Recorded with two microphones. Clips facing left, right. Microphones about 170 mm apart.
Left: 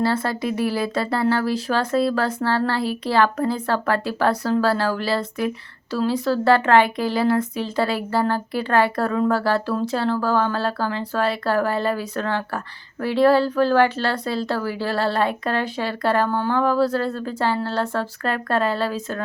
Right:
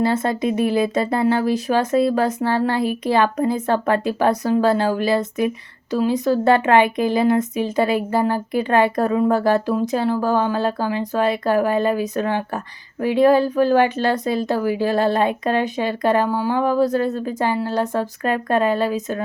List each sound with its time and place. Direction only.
0.0 s speech: 20° right (ahead or behind)